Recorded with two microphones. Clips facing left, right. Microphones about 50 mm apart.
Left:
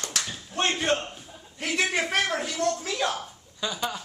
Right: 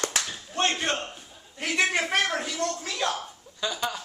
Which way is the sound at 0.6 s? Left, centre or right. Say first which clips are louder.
Left 2 dB; centre.